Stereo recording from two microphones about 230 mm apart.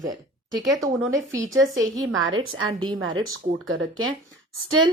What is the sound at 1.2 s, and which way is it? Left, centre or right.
A woman's voice, right.